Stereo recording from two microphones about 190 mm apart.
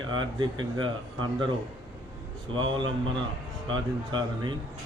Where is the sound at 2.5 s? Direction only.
25° right (ahead or behind).